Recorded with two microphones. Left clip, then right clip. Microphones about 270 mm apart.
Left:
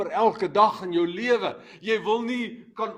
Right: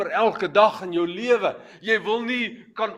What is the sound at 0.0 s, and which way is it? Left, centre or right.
A man's voice, left.